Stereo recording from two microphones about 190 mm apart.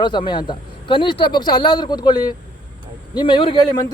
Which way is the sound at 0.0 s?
25° left (ahead or behind).